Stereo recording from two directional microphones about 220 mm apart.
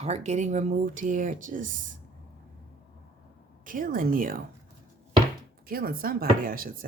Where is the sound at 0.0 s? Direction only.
30° right (ahead or behind).